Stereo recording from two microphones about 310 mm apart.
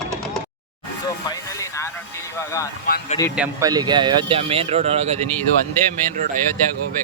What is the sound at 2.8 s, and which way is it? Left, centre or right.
Speech, left.